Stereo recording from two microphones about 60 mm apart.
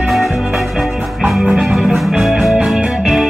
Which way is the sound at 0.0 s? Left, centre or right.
Centre.